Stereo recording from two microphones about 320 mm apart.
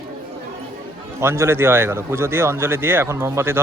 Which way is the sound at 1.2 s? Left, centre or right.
Centre.